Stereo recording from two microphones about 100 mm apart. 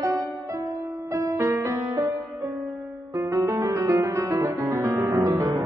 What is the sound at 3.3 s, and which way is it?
Music, 35° right (ahead or behind).